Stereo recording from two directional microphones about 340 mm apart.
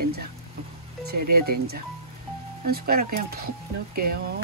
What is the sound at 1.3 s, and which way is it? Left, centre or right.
Speech, right.